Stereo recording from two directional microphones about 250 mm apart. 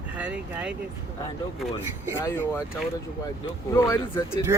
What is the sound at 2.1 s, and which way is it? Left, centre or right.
Speech, centre.